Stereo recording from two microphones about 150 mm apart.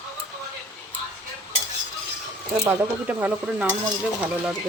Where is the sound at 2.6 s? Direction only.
10° right (ahead or behind).